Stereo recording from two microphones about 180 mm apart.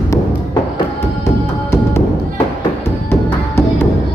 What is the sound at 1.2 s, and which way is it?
Music, 15° left (ahead or behind).